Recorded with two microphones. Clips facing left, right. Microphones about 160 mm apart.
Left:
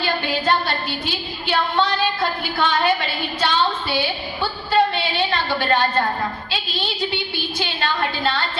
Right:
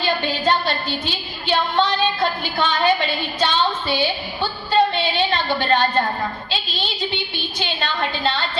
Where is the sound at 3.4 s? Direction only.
20° right (ahead or behind).